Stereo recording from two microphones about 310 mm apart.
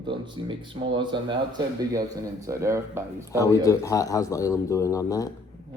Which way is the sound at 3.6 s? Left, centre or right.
Centre.